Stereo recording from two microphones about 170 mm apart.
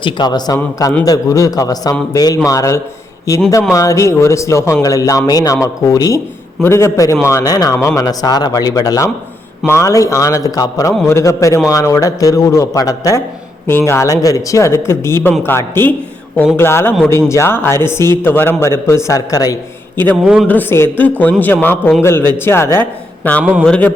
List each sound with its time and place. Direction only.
0.0 s a man's voice: 25° left (ahead or behind)
20.2 s speech: 5° right (ahead or behind)
20.5 s a man's voice: 10° left (ahead or behind)